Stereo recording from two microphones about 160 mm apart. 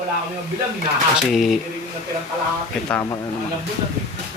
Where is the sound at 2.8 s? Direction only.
20° left (ahead or behind).